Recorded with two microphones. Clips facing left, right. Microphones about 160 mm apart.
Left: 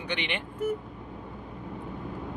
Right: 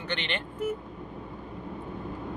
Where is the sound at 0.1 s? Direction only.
15° left (ahead or behind).